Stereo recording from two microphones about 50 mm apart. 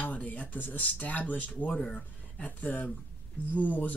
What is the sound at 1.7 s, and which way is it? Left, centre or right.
Speech, centre.